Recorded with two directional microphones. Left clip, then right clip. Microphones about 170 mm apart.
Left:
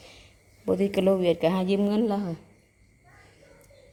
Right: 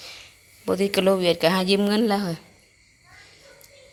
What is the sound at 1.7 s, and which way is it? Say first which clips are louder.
Speech: right 4 dB; 10° right (ahead or behind).